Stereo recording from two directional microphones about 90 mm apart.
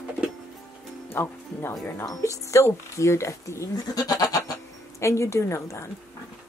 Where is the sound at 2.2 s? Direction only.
35° left (ahead or behind).